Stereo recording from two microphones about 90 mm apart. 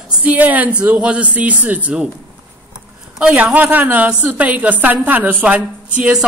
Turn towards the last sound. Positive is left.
turn(degrees=-15)  # may be behind; listen again after turning